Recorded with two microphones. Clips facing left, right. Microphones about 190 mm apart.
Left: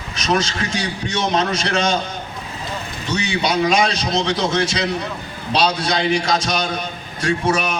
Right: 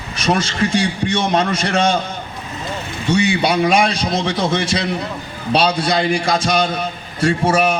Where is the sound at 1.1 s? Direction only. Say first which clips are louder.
Right 1 dB; 55° right (ahead or behind).